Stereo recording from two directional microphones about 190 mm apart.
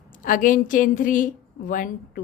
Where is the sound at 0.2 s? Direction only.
45° left (ahead or behind).